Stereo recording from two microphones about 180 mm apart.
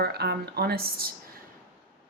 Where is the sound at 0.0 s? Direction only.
65° right (ahead or behind).